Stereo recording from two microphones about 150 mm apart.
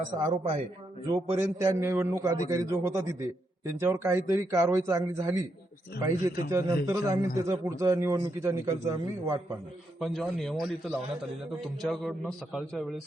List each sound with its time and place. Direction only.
0.2 s a man's voice: 30° right (ahead or behind)
10.0 s a man's voice: centre (ahead or behind)
11.8 s a man's voice: centre (ahead or behind)